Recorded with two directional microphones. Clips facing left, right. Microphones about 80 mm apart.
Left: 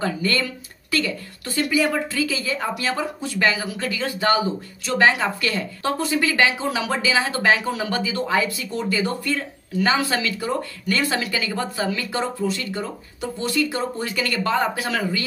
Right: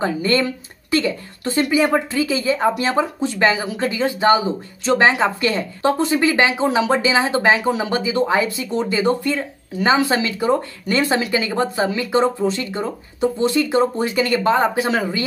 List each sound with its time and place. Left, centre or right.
0.0 s speech: right